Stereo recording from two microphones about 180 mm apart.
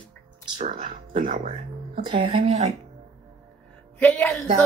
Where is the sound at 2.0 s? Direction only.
30° right (ahead or behind).